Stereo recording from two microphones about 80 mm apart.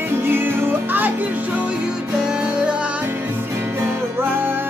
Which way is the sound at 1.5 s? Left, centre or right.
Centre.